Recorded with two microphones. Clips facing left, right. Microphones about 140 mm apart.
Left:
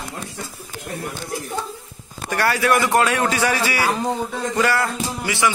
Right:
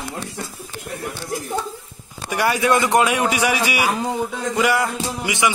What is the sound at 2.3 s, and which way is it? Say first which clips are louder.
A man's voice: right 1 dB; 15° right (ahead or behind).